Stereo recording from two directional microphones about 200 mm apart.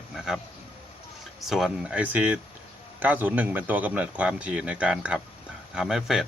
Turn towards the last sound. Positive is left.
turn(degrees=0)  # may be behind; listen again after turning